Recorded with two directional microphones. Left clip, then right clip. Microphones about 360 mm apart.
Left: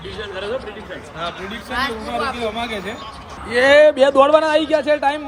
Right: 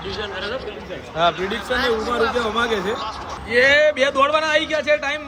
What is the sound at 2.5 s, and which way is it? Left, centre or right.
Speech, centre.